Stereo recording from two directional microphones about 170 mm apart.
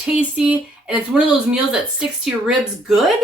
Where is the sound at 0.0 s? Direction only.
5° right (ahead or behind).